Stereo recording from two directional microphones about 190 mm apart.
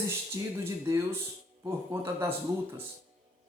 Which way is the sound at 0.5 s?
15° right (ahead or behind).